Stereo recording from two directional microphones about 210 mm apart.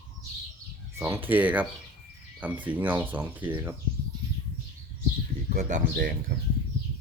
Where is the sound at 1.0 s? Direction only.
10° right (ahead or behind).